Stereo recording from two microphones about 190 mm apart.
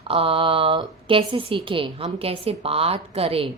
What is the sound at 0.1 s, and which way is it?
A woman's voice, 30° right (ahead or behind).